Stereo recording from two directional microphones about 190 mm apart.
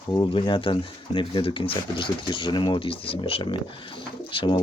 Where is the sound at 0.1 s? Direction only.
25° left (ahead or behind).